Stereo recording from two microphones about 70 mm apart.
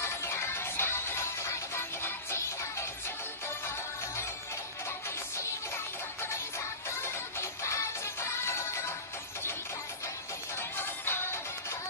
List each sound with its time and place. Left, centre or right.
0.0 s music: left
6.9 s music: left
10.8 s music: left